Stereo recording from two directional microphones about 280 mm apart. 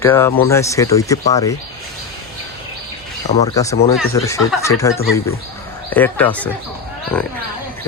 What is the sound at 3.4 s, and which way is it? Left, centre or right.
Speech, centre.